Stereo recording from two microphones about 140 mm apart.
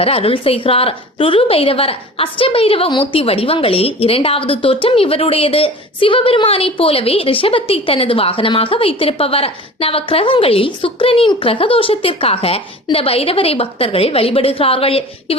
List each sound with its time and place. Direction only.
0.0 s a woman's voice: 45° left (ahead or behind)